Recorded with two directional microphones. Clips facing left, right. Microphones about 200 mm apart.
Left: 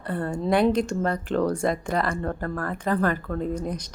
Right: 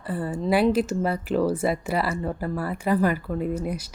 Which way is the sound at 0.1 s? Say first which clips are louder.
Even; 5° right (ahead or behind).